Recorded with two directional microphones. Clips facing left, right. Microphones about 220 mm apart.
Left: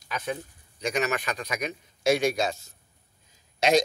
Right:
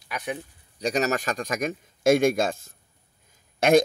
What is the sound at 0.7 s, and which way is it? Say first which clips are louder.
A man's voice: right 3 dB; 35° right (ahead or behind).